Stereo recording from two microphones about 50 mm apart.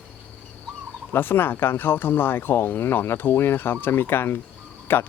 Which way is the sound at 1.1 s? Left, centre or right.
Left.